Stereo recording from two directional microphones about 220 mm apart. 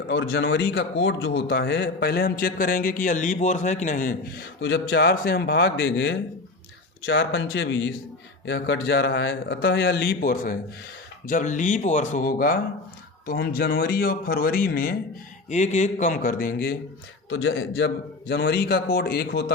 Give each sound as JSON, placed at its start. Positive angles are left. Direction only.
{"t": 0.1, "sound": "a man's voice", "side_deg": 50}
{"t": 4.6, "sound": "a man's voice", "side_deg": 50}
{"t": 17.2, "sound": "a man's voice", "side_deg": 65}